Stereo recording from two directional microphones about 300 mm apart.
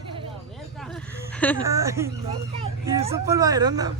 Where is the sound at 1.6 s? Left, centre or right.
Centre.